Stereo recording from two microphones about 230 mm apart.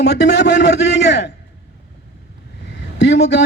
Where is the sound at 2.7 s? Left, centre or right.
Left.